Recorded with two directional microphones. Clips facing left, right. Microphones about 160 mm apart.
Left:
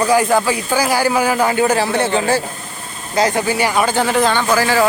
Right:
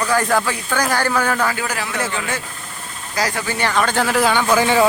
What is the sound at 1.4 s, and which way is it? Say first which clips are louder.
Speech: left 8 dB; 25° left (ahead or behind).